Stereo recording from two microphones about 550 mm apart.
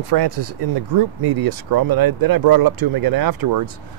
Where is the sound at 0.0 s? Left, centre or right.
Right.